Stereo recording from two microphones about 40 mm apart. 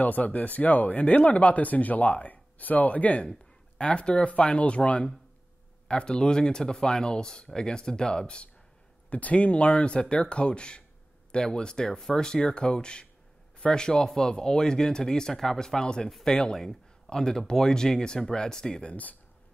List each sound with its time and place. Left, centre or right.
0.0 s speech: left
3.3 s speech: left
9.1 s speech: left; by 18.9 s centre